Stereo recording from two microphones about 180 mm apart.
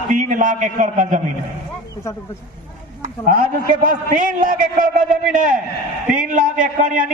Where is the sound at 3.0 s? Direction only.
50° right (ahead or behind).